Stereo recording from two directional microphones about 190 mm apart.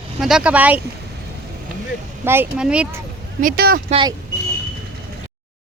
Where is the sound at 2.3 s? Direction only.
10° right (ahead or behind).